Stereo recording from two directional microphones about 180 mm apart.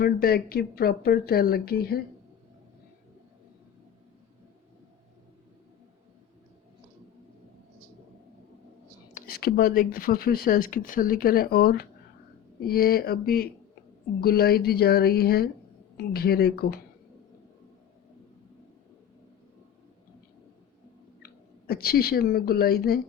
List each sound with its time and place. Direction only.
0.0 s speech: 60° left (ahead or behind)
9.1 s speech: 55° left (ahead or behind)
21.7 s speech: 55° left (ahead or behind)